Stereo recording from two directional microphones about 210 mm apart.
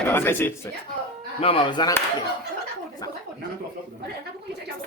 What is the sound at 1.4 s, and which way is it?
Speech, 25° left (ahead or behind).